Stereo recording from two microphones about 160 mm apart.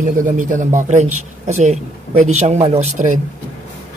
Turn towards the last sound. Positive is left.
turn(degrees=-50)  # may be behind; listen again after turning